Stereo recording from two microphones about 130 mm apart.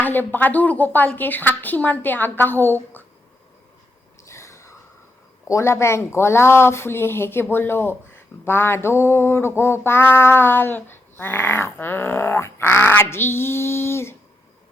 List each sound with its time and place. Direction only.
0.0 s speech: 15° left (ahead or behind)
4.3 s a sound: 20° left (ahead or behind)
5.5 s speech: 20° left (ahead or behind)